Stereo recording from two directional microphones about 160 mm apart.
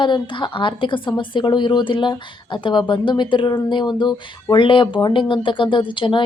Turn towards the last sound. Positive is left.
turn(degrees=30)  # may be behind; listen again after turning